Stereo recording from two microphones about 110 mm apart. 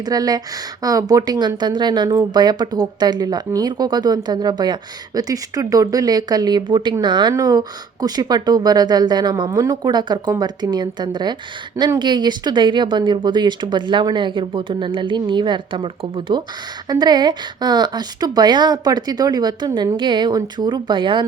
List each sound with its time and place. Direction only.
0.0 s speech: 35° right (ahead or behind)
16.9 s speech: 40° right (ahead or behind)